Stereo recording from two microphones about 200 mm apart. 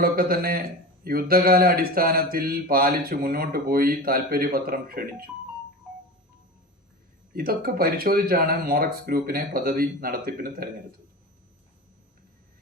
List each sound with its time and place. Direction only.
0.0 s speech: 50° right (ahead or behind)
7.3 s speech: 50° right (ahead or behind)